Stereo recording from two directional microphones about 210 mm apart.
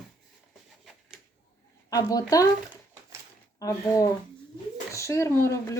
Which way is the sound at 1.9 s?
15° left (ahead or behind).